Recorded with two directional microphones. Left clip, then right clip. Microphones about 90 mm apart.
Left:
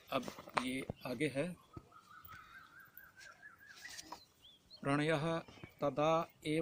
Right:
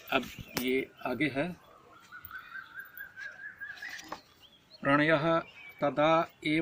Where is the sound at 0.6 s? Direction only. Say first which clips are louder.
Right 11 dB; 40° left (ahead or behind).